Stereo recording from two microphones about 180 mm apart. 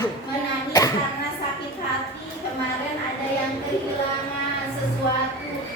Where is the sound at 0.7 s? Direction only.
20° left (ahead or behind).